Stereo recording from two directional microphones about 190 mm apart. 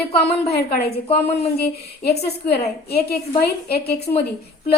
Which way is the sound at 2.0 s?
60° left (ahead or behind).